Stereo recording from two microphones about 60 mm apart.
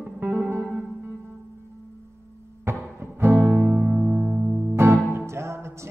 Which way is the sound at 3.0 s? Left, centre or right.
Right.